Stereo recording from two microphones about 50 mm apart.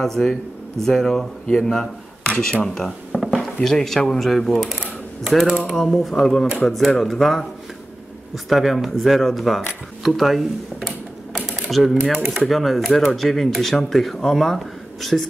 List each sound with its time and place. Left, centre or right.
0.0 s speech: centre
4.6 s typewriter: centre
5.8 s speech: centre
8.5 s speech: centre
11.7 s speech: centre